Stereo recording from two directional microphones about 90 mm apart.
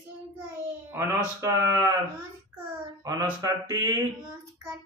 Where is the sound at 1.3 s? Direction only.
35° right (ahead or behind).